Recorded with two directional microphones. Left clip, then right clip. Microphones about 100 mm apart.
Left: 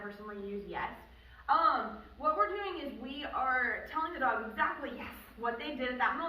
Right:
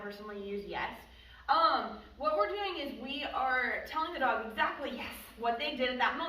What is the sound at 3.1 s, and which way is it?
A woman's voice, 30° right (ahead or behind).